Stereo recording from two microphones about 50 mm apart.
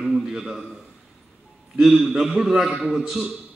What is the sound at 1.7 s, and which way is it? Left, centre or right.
A man's voice, centre.